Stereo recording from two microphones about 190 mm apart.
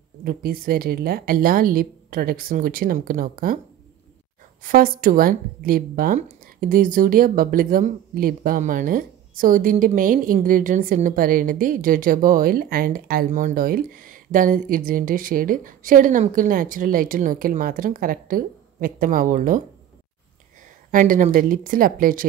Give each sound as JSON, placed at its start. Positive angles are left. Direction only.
{"t": 0.2, "sound": "a woman's voice", "side_deg": -55}
{"t": 4.6, "sound": "a woman's voice", "side_deg": -50}
{"t": 20.9, "sound": "a woman's voice", "side_deg": -45}